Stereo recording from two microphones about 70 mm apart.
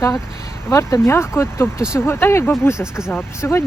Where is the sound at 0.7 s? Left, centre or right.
Left.